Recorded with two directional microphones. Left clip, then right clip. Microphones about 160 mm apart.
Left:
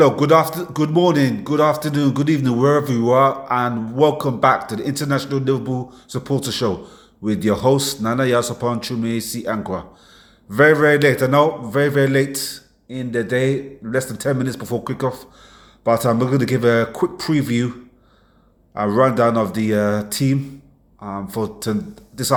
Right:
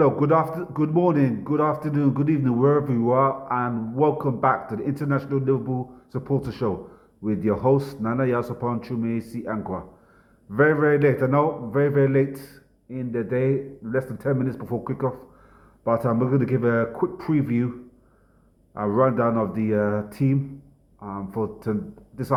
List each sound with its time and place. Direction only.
0.0 s a man's voice: 20° left (ahead or behind)
18.7 s a man's voice: 20° left (ahead or behind)